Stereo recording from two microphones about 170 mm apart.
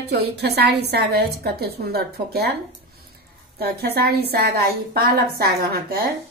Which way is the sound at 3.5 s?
70° right (ahead or behind).